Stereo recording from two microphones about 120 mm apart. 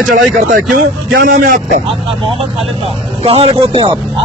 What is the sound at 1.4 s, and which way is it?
Speech, 90° right.